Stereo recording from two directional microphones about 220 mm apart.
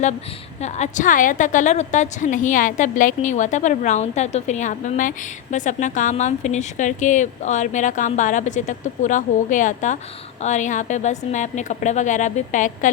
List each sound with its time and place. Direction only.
0.6 s a woman's voice: 35° left (ahead or behind)